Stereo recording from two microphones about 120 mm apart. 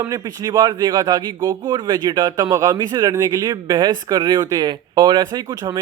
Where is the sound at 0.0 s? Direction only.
35° right (ahead or behind).